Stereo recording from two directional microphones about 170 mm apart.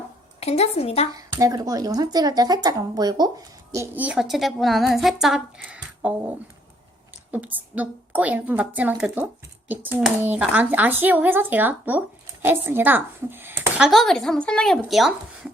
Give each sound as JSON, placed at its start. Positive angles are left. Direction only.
{"t": 0.3, "sound": "speech", "side_deg": 40}
{"t": 1.1, "sound": "a woman's voice", "side_deg": -20}